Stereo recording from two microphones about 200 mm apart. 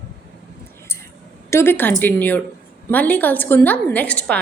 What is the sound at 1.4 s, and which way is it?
A woman's voice, 10° left (ahead or behind).